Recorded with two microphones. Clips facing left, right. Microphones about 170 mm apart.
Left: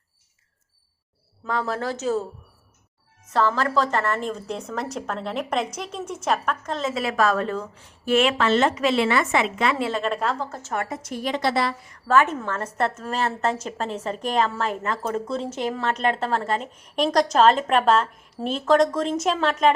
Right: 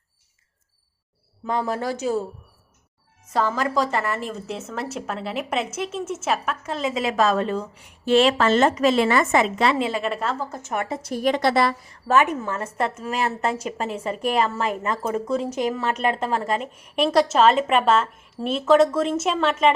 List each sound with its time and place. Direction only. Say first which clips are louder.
1.5 s a woman's voice: right 2 dB; 15° right (ahead or behind)
3.2 s a woman's voice: left 1 dB; 10° right (ahead or behind)
8.1 s a woman's voice: right 2 dB; 35° right (ahead or behind)
9.7 s a woman's voice: right 1 dB; 20° right (ahead or behind)
10.0 s a woman's voice: left 1 dB; 5° right (ahead or behind)
10.8 s a woman's voice: right 3 dB; 30° right (ahead or behind)
11.2 s a woman's voice: right 4 dB; 50° right (ahead or behind)
12.0 s a woman's voice: even; 15° right (ahead or behind); by 19.7 s centre (ahead or behind)